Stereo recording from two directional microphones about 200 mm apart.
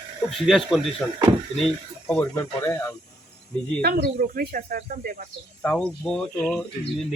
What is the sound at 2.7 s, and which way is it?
Speech, 15° left (ahead or behind).